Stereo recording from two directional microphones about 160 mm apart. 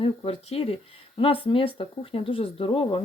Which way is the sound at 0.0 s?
40° left (ahead or behind).